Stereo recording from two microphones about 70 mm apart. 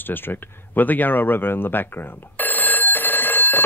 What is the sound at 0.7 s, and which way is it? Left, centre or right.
Speech, left.